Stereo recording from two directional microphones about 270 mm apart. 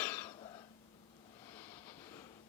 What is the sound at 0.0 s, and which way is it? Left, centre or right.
Cough, centre.